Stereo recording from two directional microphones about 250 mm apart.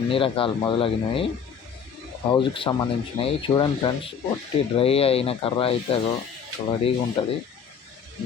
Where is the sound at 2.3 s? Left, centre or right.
Centre.